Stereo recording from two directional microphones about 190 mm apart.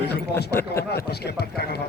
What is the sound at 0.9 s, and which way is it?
Speech, 60° left (ahead or behind).